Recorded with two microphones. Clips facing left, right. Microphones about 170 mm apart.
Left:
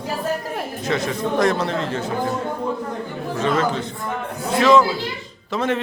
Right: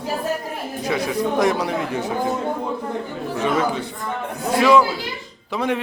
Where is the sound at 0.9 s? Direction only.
10° right (ahead or behind).